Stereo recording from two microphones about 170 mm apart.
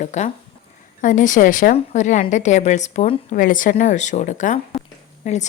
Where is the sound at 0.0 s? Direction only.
45° left (ahead or behind).